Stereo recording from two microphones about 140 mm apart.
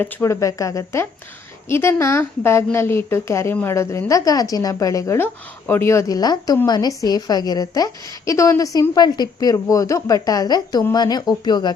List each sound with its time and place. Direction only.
0.0 s a woman's voice: 20° left (ahead or behind)